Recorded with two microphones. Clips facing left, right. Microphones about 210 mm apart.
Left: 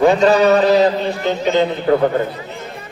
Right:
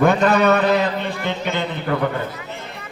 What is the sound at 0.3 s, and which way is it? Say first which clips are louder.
A man's voice: left 4 dB; 35° left (ahead or behind).